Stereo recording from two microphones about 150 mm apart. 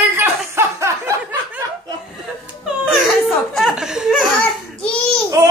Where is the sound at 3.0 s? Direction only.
5° right (ahead or behind).